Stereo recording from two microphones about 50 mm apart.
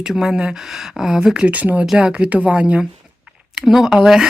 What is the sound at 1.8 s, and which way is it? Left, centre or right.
Speech, centre.